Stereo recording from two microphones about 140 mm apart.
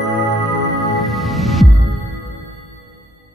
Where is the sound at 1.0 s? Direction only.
Centre (ahead or behind).